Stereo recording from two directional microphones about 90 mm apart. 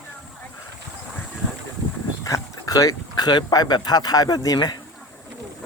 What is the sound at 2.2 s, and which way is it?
Speech, 40° left (ahead or behind).